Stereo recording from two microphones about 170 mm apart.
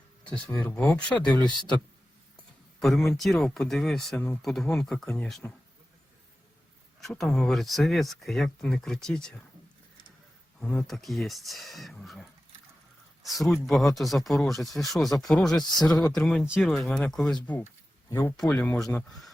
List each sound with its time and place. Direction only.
0.3 s speech: 5° left (ahead or behind)
2.8 s speech: centre (ahead or behind)
7.0 s speech: 5° left (ahead or behind)
10.6 s speech: 5° left (ahead or behind)